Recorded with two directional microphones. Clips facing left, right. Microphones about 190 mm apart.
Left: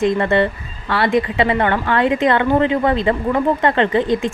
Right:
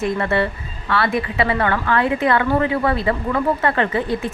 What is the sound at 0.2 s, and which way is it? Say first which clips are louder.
A woman's voice: left 4 dB; 30° left (ahead or behind).